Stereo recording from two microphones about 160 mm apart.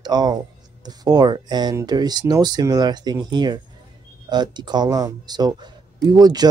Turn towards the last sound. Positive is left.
turn(degrees=-25)  # may be behind; listen again after turning